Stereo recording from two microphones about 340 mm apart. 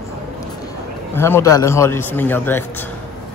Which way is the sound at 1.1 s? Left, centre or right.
Centre.